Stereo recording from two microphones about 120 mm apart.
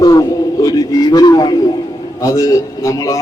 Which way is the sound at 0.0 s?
30° left (ahead or behind).